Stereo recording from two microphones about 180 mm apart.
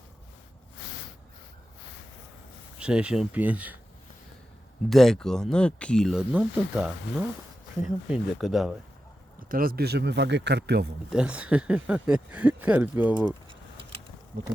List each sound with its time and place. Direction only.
2.7 s speech: 5° right (ahead or behind)
4.9 s speech: centre (ahead or behind)
9.5 s speech: 55° right (ahead or behind); by 10.8 s 70° right (ahead or behind)
11.1 s speech: 5° right (ahead or behind)